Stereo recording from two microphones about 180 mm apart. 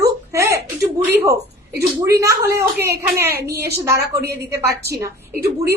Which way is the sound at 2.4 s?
10° right (ahead or behind).